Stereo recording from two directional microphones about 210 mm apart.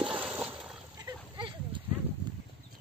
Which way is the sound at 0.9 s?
20° right (ahead or behind).